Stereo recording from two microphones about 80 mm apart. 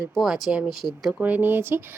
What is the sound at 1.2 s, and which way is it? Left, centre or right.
Speech, right.